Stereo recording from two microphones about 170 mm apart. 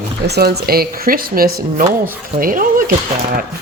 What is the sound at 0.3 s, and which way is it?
Speech, 70° right (ahead or behind).